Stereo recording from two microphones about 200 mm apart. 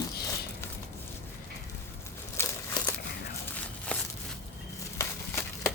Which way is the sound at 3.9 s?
5° left (ahead or behind).